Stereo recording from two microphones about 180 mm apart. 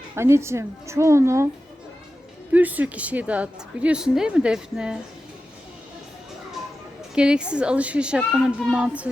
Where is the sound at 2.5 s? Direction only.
10° right (ahead or behind).